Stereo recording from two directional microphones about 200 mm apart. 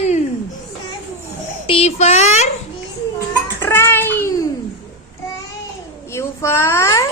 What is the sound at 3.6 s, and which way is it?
Cat, 10° left (ahead or behind).